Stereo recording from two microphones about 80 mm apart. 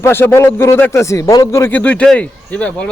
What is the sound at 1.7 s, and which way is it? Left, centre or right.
Speech, centre.